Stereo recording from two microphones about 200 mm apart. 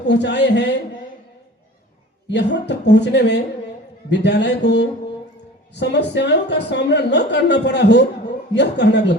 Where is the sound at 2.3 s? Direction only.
60° left (ahead or behind).